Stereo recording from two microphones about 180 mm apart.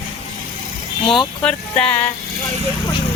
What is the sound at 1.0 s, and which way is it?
Speech, 5° left (ahead or behind).